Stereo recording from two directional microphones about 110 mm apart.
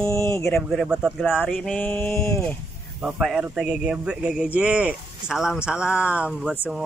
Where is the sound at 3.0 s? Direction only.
5° right (ahead or behind).